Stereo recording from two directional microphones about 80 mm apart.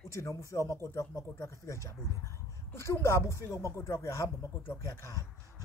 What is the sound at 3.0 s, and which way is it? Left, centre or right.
Speech, left.